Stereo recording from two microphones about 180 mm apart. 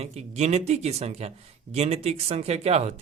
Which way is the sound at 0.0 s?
35° right (ahead or behind).